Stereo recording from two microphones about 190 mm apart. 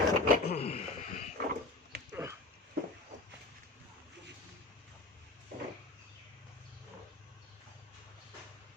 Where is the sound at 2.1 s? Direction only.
15° right (ahead or behind).